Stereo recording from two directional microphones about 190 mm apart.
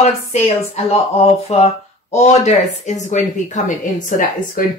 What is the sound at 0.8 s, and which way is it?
Speech, 35° left (ahead or behind).